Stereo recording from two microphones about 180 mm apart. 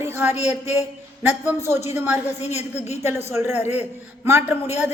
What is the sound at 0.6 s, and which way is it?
Speech, 35° left (ahead or behind).